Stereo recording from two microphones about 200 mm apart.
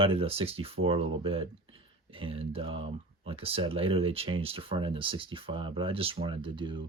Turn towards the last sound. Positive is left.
turn(degrees=-25)  # may be behind; listen again after turning